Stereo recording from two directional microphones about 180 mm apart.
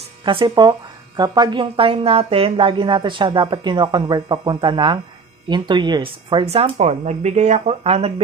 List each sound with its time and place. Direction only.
0.2 s speech: 25° right (ahead or behind)